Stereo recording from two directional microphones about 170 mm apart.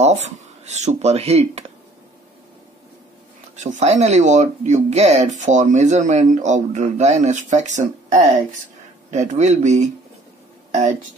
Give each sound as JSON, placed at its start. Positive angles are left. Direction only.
{"t": 0.0, "sound": "speech", "side_deg": -40}
{"t": 3.5, "sound": "speech", "side_deg": -45}